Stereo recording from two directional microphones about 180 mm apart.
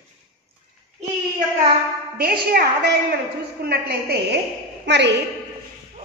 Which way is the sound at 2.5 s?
55° right (ahead or behind).